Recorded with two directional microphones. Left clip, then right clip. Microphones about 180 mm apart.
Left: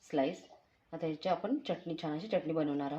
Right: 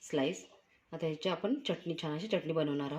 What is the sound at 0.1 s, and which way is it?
Speech, 45° right (ahead or behind).